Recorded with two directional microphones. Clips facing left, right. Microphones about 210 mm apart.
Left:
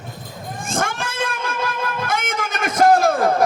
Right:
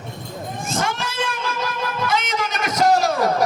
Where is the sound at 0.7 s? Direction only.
50° left (ahead or behind).